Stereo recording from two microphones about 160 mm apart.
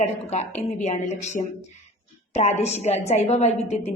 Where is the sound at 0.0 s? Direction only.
45° left (ahead or behind).